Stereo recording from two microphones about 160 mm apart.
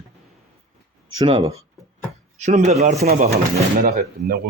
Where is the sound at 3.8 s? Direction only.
70° right (ahead or behind).